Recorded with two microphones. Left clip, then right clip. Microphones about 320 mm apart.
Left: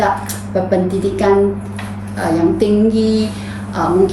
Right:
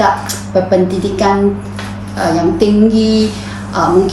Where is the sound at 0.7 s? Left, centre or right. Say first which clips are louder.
Right 3 dB; centre.